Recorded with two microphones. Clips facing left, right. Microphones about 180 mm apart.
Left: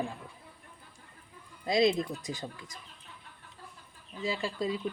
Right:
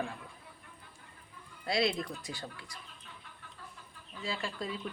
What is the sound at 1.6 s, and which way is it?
Speech, 20° left (ahead or behind).